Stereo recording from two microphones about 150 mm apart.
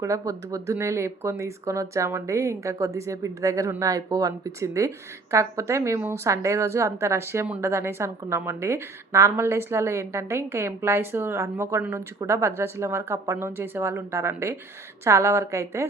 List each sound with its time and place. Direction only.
0.0 s a woman's voice: 20° right (ahead or behind)